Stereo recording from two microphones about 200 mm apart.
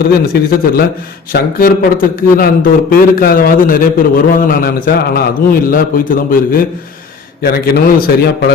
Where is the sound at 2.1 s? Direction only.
45° left (ahead or behind).